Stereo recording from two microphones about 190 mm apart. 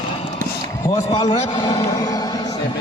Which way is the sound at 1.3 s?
35° left (ahead or behind).